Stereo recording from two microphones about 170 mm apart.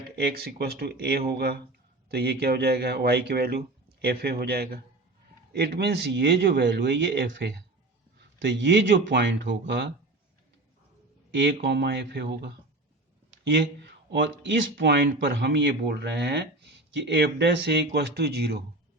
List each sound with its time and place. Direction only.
0.2 s speech: 65° right (ahead or behind); by 9.9 s 90° right
11.3 s speech: 90° right; by 12.5 s 75° right (ahead or behind)
13.4 s speech: 90° right; by 18.6 s 75° right (ahead or behind)